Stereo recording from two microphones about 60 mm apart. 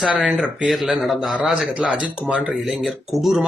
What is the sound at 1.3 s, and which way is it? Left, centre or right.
Speech, centre.